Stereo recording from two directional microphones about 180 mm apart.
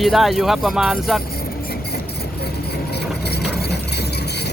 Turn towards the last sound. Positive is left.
turn(degrees=65)  # may be behind; listen again after turning